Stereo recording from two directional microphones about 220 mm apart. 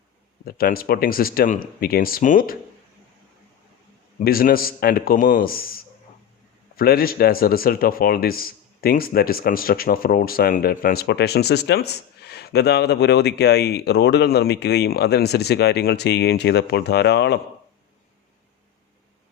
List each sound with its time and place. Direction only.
0.4 s speech: 40° left (ahead or behind)
4.2 s speech: 40° left (ahead or behind)